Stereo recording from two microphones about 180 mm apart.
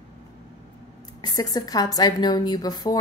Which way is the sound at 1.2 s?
20° left (ahead or behind).